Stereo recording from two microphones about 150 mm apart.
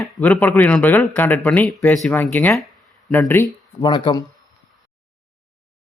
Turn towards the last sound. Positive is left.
turn(degrees=30)  # may be behind; listen again after turning